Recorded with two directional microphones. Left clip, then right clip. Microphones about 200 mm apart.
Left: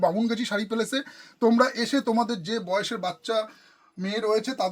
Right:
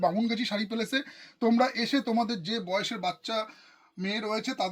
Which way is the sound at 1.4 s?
15° left (ahead or behind).